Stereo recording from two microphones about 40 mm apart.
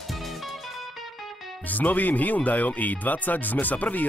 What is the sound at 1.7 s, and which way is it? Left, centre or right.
Speech, left.